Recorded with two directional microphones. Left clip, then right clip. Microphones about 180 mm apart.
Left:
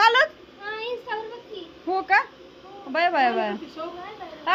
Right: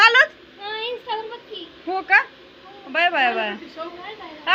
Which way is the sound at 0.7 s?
10° left (ahead or behind).